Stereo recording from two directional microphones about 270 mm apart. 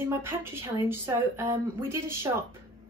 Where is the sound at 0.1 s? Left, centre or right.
Centre.